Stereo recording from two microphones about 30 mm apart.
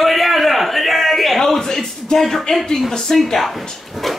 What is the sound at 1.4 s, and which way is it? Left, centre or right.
A man's voice, centre.